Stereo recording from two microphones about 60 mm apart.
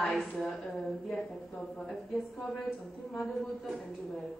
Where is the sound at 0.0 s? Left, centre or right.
Centre.